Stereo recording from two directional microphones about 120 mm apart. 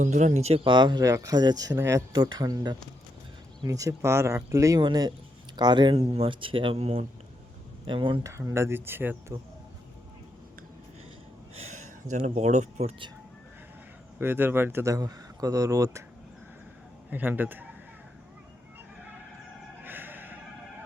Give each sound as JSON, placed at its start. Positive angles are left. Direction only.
{"t": 0.0, "sound": "speech", "side_deg": -90}
{"t": 0.6, "sound": "speech", "side_deg": -40}
{"t": 4.8, "sound": "speech", "side_deg": -35}
{"t": 7.9, "sound": "speech", "side_deg": -45}
{"t": 8.2, "sound": "speech", "side_deg": -25}
{"t": 11.5, "sound": "a sound", "side_deg": -80}
{"t": 12.1, "sound": "speech", "side_deg": -70}
{"t": 14.2, "sound": "speech", "side_deg": -15}
{"t": 17.1, "sound": "speech", "side_deg": -15}
{"t": 19.8, "sound": "gasp", "side_deg": -15}